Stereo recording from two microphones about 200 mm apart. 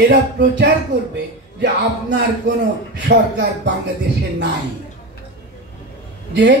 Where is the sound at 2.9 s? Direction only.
60° right (ahead or behind).